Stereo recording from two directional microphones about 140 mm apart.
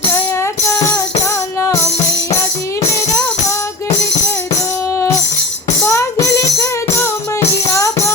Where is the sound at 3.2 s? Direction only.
20° left (ahead or behind).